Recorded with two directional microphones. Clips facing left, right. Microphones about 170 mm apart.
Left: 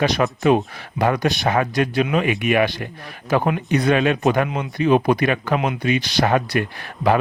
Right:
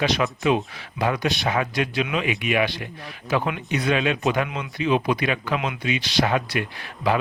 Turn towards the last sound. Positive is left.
turn(degrees=50)  # may be behind; listen again after turning